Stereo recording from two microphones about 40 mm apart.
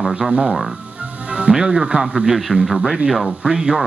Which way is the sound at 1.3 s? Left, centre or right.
Right.